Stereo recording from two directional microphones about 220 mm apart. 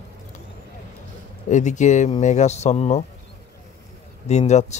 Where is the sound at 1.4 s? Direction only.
35° left (ahead or behind).